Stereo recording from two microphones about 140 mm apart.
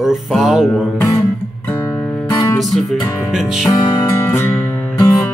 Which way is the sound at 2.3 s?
30° left (ahead or behind).